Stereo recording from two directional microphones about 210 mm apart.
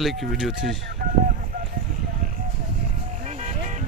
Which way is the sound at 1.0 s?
45° right (ahead or behind).